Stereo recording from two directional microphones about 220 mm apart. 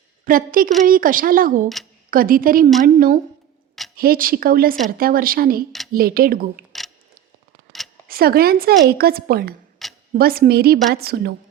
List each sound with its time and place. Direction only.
0.3 s a woman's voice: 40° right (ahead or behind)
8.0 s a woman's voice: 45° right (ahead or behind)
9.8 s a sound: centre (ahead or behind)
10.2 s a woman's voice: 45° right (ahead or behind)